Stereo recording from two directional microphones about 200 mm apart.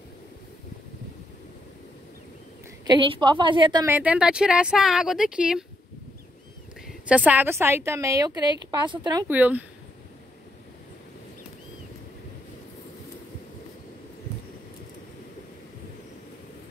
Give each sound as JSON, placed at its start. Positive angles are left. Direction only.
{"t": 2.9, "sound": "a woman's voice", "side_deg": -25}
{"t": 3.8, "sound": "speech", "side_deg": -10}
{"t": 7.1, "sound": "a woman's voice", "side_deg": -5}
{"t": 9.3, "sound": "a woman's voice", "side_deg": -10}